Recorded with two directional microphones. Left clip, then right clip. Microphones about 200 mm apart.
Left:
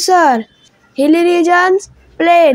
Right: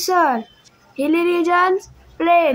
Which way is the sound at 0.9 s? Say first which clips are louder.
Left 7 dB; 30° left (ahead or behind).